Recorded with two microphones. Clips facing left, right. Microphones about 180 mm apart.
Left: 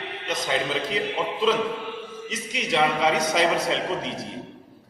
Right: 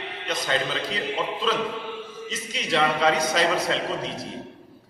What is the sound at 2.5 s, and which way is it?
A man's voice, 20° left (ahead or behind).